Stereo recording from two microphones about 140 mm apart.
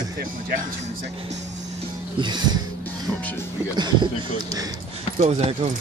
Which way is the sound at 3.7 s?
30° right (ahead or behind).